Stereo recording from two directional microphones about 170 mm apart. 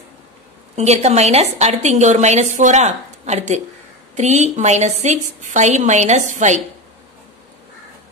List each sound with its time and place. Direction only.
0.7 s a woman's voice: 40° right (ahead or behind)